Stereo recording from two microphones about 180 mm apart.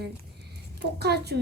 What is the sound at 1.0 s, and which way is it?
Speech, 65° right (ahead or behind).